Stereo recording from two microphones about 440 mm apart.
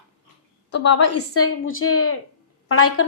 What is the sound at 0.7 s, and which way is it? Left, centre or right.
A woman's voice, left.